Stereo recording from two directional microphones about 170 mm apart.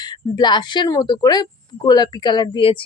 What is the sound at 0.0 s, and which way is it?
Speech, 25° left (ahead or behind).